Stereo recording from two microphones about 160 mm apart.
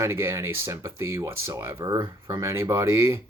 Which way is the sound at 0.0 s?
15° right (ahead or behind).